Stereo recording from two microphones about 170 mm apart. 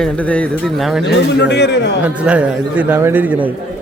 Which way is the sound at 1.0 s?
85° left.